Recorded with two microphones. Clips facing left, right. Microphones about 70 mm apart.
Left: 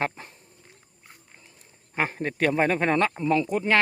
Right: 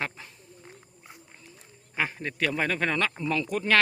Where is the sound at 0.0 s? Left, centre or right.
Left.